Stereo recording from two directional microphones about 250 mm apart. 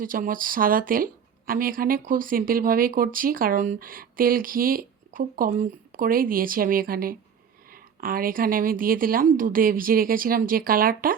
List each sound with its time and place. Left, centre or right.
0.0 s a woman's voice: right